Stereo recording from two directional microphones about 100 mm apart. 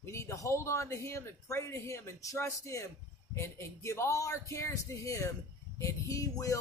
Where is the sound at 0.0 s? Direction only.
30° left (ahead or behind).